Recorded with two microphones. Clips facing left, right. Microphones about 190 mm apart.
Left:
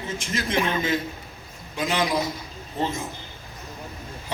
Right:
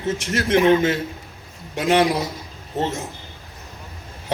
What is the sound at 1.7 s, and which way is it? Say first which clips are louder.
Speech: right 8 dB; 60° right (ahead or behind).